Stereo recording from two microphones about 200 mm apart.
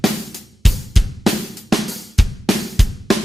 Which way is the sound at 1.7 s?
Centre (ahead or behind).